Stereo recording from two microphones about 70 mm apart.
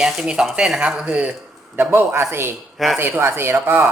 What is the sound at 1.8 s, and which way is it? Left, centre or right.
Speech, right.